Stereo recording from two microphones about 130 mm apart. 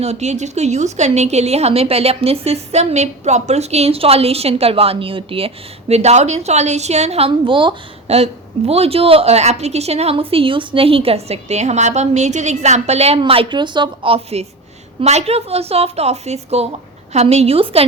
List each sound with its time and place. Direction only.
0.0 s a woman's voice: 60° right (ahead or behind)
5.9 s a woman's voice: 55° right (ahead or behind); by 8.1 s 40° right (ahead or behind)
8.1 s a woman's voice: 50° right (ahead or behind)